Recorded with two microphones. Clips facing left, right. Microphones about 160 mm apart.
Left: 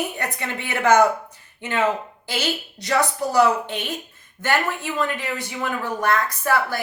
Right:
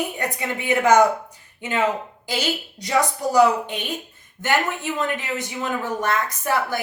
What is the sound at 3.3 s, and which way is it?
A woman's voice, 15° right (ahead or behind).